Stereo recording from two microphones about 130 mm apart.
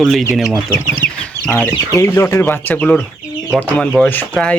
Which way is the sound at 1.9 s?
20° left (ahead or behind).